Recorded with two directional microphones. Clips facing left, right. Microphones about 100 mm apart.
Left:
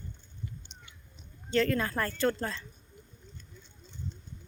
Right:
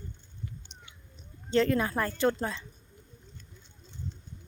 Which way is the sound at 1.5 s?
20° right (ahead or behind).